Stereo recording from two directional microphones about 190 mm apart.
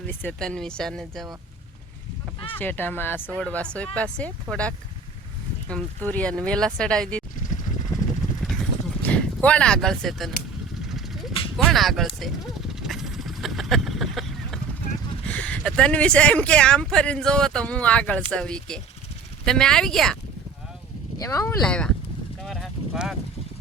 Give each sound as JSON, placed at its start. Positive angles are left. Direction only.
{"t": 0.0, "sound": "speech", "side_deg": 10}
{"t": 2.6, "sound": "speech", "side_deg": 10}
{"t": 4.5, "sound": "speech", "side_deg": -15}
{"t": 5.6, "sound": "speech", "side_deg": 5}
{"t": 8.2, "sound": "vehicle", "side_deg": 0}
{"t": 9.0, "sound": "speech", "side_deg": 5}
{"t": 10.8, "sound": "a sound", "side_deg": 0}
{"t": 11.5, "sound": "speech", "side_deg": 0}
{"t": 12.8, "sound": "a sound", "side_deg": 0}
{"t": 15.3, "sound": "speech", "side_deg": 5}
{"t": 21.2, "sound": "speech", "side_deg": 15}
{"t": 21.6, "sound": "speech", "side_deg": 5}
{"t": 22.4, "sound": "a sound", "side_deg": 0}